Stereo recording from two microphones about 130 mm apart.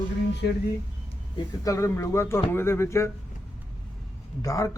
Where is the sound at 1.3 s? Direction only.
25° left (ahead or behind).